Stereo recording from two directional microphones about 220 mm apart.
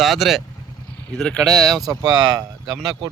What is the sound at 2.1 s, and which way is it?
Speech, 20° right (ahead or behind).